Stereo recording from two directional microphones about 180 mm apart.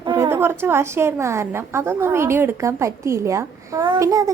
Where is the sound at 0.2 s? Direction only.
15° right (ahead or behind).